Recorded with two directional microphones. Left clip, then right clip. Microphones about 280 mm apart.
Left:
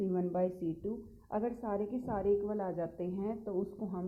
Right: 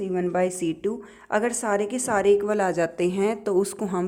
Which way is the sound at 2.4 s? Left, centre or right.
Right.